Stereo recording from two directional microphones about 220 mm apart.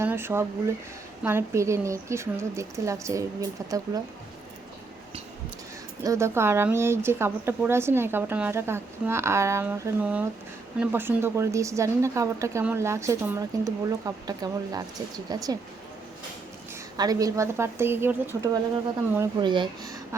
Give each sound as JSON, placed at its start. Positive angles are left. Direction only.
{"t": 0.0, "sound": "a woman's voice", "side_deg": -10}
{"t": 6.0, "sound": "a woman's voice", "side_deg": -15}
{"t": 17.0, "sound": "a woman's voice", "side_deg": -15}